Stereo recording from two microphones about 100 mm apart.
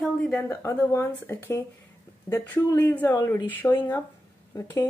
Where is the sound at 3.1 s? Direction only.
30° left (ahead or behind).